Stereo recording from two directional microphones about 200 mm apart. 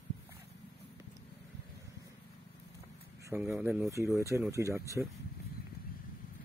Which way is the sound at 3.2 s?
10° right (ahead or behind).